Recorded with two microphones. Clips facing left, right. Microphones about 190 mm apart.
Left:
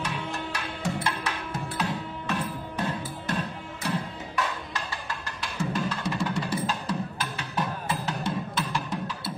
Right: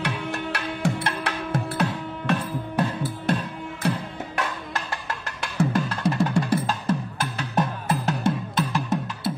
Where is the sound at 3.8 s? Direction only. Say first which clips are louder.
Right 4 dB; 55° right (ahead or behind).